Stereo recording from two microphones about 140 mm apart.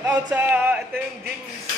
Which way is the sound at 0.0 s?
15° right (ahead or behind).